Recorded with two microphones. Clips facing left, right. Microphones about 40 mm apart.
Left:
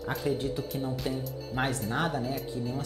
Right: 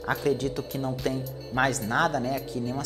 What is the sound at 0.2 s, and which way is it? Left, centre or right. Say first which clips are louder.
Speech: right 4 dB; right.